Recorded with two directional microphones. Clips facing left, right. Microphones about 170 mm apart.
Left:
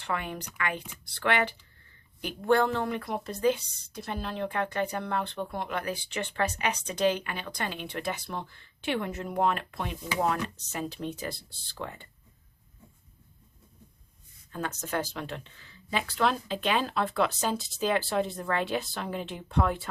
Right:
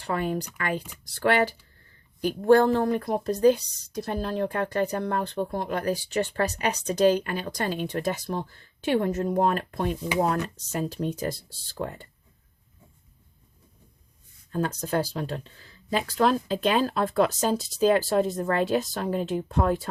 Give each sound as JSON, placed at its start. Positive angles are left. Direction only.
{"t": 0.0, "sound": "a woman's voice", "side_deg": -40}
{"t": 14.5, "sound": "a woman's voice", "side_deg": -35}